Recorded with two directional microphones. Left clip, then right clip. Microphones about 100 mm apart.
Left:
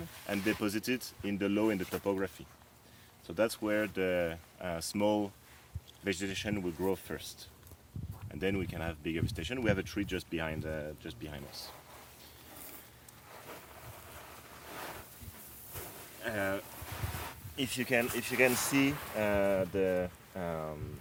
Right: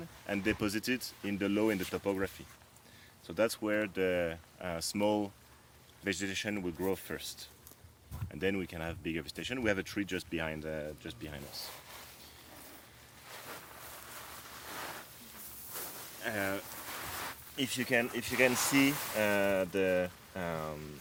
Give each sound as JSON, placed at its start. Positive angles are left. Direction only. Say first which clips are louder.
{"t": 0.3, "sound": "speech", "louder": "even", "side_deg": 0}
{"t": 14.1, "sound": "vehicle", "louder": "right 2 dB", "side_deg": -10}
{"t": 15.7, "sound": "a sound", "louder": "right 2 dB", "side_deg": -15}
{"t": 18.2, "sound": "speech", "louder": "even", "side_deg": 0}
{"t": 19.1, "sound": "speech", "louder": "left 1 dB", "side_deg": -20}